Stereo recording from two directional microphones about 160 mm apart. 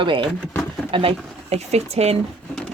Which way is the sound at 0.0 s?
30° right (ahead or behind).